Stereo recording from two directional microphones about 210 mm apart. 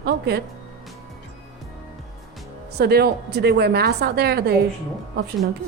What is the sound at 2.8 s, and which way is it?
A woman's voice, 50° right (ahead or behind).